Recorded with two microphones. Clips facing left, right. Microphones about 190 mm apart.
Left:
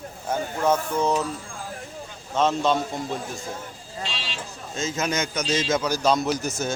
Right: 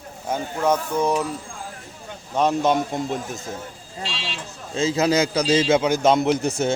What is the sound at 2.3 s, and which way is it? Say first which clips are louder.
A man's voice: right 2 dB; 15° right (ahead or behind).